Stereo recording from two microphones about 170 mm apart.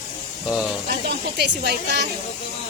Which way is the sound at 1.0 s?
70° right (ahead or behind).